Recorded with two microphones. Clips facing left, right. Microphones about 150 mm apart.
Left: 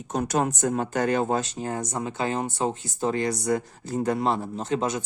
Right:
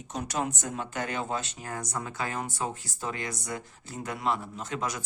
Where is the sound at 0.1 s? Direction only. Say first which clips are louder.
Left 7 dB; 50° left (ahead or behind).